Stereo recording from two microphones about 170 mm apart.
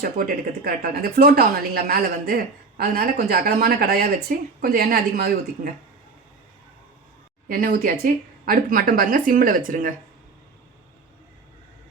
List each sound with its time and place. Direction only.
0.0 s speech: 60° right (ahead or behind)
7.4 s speech: 55° right (ahead or behind)